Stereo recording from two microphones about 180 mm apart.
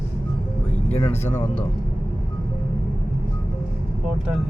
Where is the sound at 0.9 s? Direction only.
35° left (ahead or behind).